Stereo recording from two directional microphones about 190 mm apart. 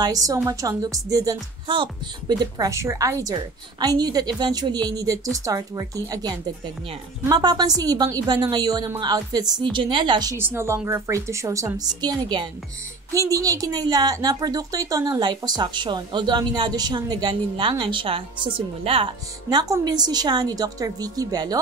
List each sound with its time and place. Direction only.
0.0 s a woman's voice: 20° right (ahead or behind)